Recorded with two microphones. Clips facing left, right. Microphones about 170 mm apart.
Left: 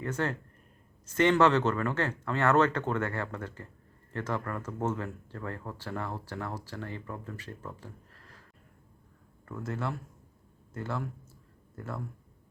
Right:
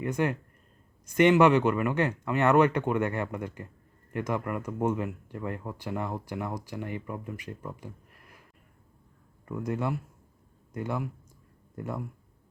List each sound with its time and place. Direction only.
0.0 s speech: 15° right (ahead or behind)
9.5 s speech: 15° right (ahead or behind)